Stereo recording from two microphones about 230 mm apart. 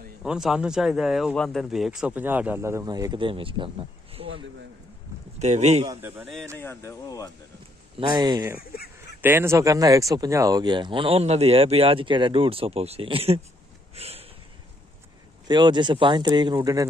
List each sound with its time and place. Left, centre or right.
0.2 s speech: centre; by 4.3 s right
5.4 s speech: right
5.9 s a man's voice: centre
6.6 s speech: centre
8.1 s a man's voice: centre
8.5 s speech: left
8.9 s speech: centre
13.9 s a sound: right
15.4 s speech: centre